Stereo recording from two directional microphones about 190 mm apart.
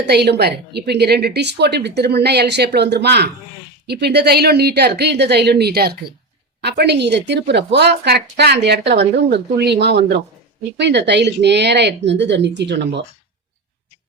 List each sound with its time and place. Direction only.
0.0 s a woman's voice: 60° right (ahead or behind)